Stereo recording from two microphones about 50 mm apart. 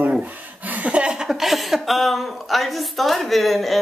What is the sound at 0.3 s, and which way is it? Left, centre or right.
Chuckle, right.